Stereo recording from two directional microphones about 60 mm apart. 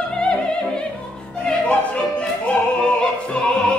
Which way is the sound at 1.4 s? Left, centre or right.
Centre.